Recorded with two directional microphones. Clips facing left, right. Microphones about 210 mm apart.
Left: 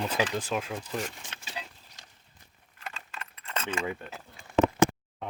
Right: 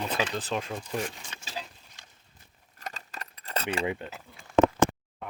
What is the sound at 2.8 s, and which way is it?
Keys jangling, 40° right (ahead or behind).